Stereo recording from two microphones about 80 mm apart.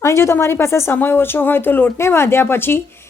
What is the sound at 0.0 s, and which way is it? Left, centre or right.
Speech, left.